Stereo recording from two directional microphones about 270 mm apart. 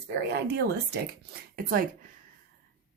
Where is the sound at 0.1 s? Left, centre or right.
Right.